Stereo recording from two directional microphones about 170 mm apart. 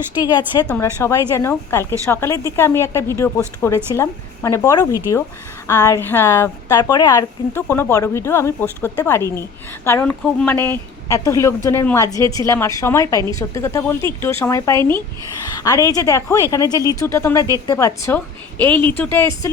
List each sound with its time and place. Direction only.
0.2 s a woman's voice: 20° left (ahead or behind)
18.7 s speech: 30° right (ahead or behind)
18.9 s a woman's voice: 10° left (ahead or behind)